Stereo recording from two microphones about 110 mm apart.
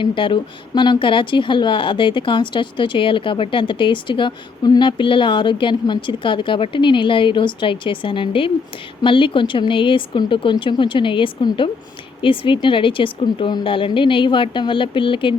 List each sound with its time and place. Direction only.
0.0 s speech: 50° left (ahead or behind)